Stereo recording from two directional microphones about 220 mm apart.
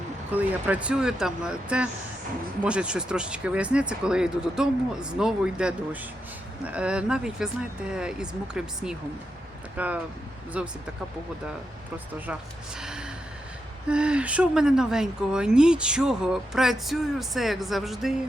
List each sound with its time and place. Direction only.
0.3 s speech: 5° right (ahead or behind)
12.8 s speech: 5° right (ahead or behind)